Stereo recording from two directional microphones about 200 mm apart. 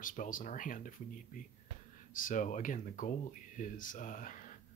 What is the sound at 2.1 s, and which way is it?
Speech, 40° left (ahead or behind).